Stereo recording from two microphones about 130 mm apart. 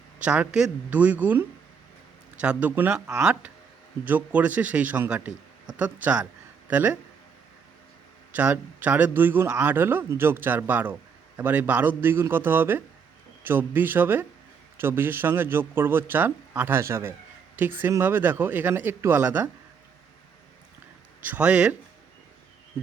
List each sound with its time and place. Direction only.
0.2 s a man's voice: 10° right (ahead or behind)
8.3 s a man's voice: 15° right (ahead or behind)
21.2 s a man's voice: 10° right (ahead or behind)